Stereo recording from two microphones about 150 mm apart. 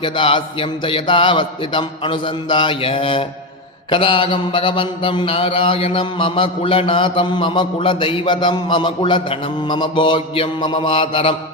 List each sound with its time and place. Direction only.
0.0 s mantra: 35° left (ahead or behind)